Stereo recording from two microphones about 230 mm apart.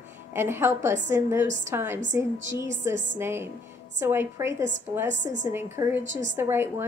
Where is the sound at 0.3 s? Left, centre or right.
Centre.